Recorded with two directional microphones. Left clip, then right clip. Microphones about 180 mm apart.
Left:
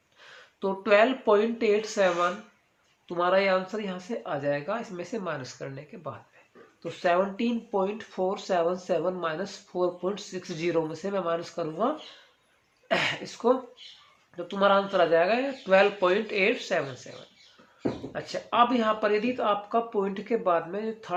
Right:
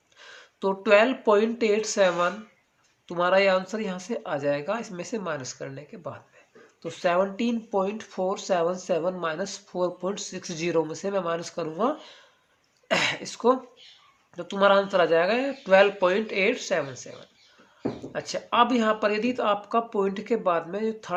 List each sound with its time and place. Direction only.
0.2 s speech: 35° right (ahead or behind)
18.1 s speech: 35° right (ahead or behind)